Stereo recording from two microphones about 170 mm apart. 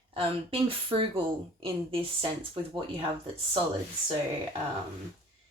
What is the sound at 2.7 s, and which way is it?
Speech, 30° right (ahead or behind).